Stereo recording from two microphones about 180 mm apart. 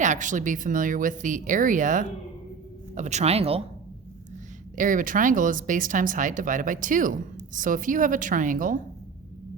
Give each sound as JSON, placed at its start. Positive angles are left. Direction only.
{"t": 0.0, "sound": "speech", "side_deg": -45}
{"t": 4.8, "sound": "speech", "side_deg": -45}